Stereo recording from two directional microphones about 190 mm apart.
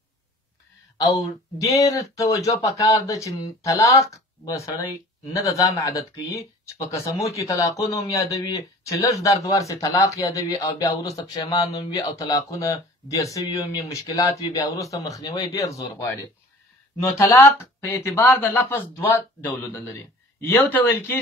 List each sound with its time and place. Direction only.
1.6 s speech: 15° left (ahead or behind)